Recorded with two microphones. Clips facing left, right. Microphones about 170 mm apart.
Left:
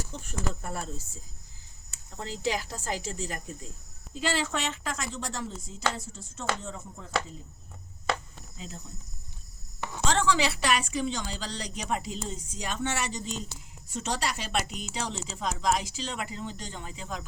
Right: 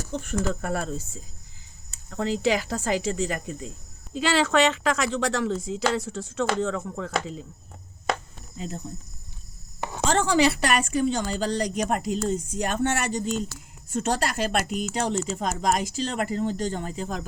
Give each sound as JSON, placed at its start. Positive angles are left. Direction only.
{"t": 0.1, "sound": "speech", "side_deg": -70}
{"t": 8.5, "sound": "speech", "side_deg": -50}
{"t": 9.8, "sound": "a woman's voice", "side_deg": -45}